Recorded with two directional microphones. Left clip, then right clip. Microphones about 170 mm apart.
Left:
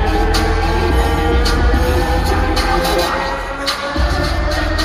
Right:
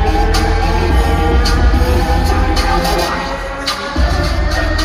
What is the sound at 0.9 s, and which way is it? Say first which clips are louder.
Music: right 1 dB; 15° left (ahead or behind).